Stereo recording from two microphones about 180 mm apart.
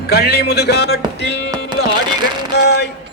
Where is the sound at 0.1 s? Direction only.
60° left (ahead or behind).